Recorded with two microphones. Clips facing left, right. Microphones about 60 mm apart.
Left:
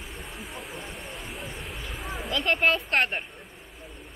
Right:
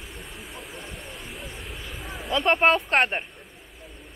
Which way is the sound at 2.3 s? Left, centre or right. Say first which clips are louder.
Right 4 dB; right.